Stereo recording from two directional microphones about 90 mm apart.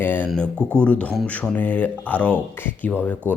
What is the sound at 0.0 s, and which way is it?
Speech, 20° left (ahead or behind).